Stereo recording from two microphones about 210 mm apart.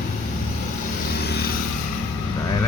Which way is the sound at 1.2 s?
50° left (ahead or behind).